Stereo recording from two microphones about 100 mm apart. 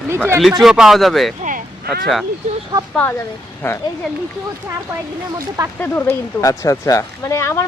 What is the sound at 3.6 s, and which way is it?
Speech, 25° left (ahead or behind).